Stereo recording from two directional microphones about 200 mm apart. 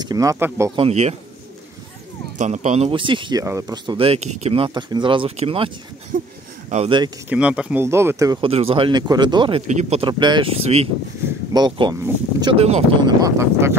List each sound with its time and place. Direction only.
0.0 s speech: 20° right (ahead or behind)
0.7 s speech: 30° right (ahead or behind)
2.3 s speech: 35° right (ahead or behind)
6.1 s speech: 45° right (ahead or behind)
6.7 s speech: 30° right (ahead or behind)
7.2 s speech: 5° right (ahead or behind)
8.5 s speech: 30° right (ahead or behind)
13.0 s speech: 15° right (ahead or behind)